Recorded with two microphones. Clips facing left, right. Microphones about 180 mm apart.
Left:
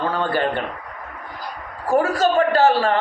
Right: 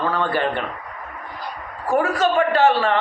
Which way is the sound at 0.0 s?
30° left (ahead or behind).